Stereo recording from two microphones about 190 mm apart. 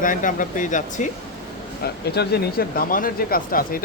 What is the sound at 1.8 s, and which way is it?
Speech, 55° left (ahead or behind).